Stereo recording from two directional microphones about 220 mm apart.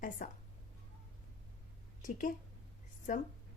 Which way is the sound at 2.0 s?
35° left (ahead or behind).